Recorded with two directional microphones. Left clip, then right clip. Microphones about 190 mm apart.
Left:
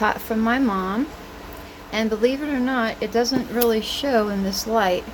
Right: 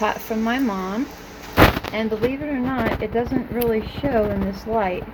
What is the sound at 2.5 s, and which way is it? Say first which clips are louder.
Speech: even; 5° left (ahead or behind).